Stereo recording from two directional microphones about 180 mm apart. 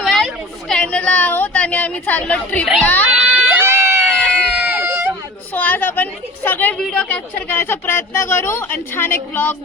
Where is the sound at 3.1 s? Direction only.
5° right (ahead or behind).